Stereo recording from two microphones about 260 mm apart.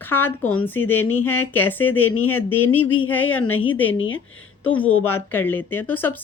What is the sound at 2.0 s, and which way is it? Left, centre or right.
A woman's voice, left.